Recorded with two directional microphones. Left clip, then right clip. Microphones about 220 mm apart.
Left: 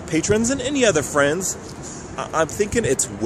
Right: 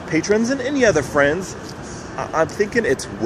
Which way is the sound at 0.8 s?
10° left (ahead or behind).